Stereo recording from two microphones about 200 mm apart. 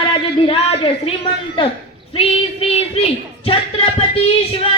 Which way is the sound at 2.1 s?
30° left (ahead or behind).